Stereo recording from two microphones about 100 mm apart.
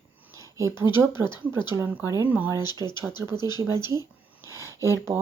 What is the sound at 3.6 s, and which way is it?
Speech, 25° right (ahead or behind).